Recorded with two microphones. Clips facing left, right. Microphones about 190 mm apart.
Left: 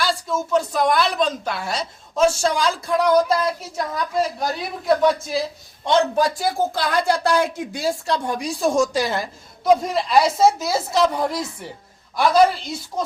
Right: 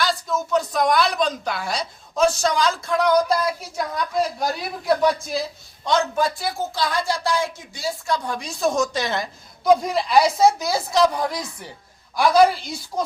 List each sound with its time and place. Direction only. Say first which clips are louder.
0.7 s a woman's voice: even; centre (ahead or behind)
5.8 s a man's voice: left 3 dB; 30° left (ahead or behind)
6.7 s a woman's voice: left 3 dB; 60° left (ahead or behind)
8.0 s a man's voice: left 2 dB; 30° left (ahead or behind)
8.3 s a woman's voice: left 3 dB; 10° left (ahead or behind)